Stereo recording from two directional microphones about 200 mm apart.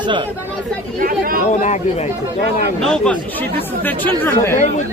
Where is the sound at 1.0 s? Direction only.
45° right (ahead or behind).